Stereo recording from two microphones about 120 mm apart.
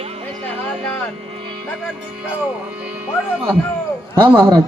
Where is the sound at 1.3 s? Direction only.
50° right (ahead or behind).